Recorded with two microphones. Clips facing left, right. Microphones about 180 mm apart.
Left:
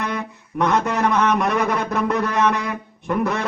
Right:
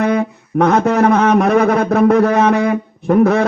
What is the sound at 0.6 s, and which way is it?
A man's voice, 50° right (ahead or behind).